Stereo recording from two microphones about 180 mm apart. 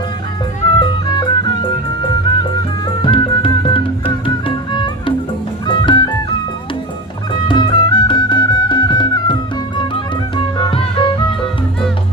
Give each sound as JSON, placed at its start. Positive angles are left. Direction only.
{"t": 0.6, "sound": "music", "side_deg": 25}
{"t": 7.4, "sound": "music", "side_deg": 25}